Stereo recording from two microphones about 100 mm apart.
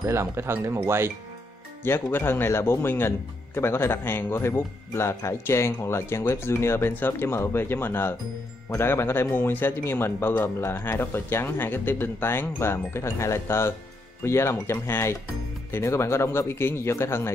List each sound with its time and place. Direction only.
0.0 s speech: 30° right (ahead or behind)
1.9 s speech: 20° left (ahead or behind)